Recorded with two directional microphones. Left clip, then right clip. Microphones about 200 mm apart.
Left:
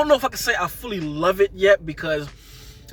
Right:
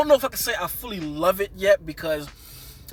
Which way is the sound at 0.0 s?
15° right (ahead or behind).